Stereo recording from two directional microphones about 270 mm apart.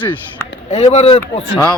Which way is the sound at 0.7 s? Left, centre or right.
Left.